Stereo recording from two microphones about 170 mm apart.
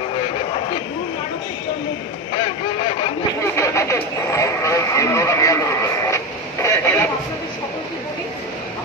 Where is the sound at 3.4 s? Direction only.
15° left (ahead or behind).